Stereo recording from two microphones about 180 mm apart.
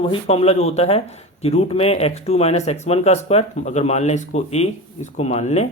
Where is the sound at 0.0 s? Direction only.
30° left (ahead or behind).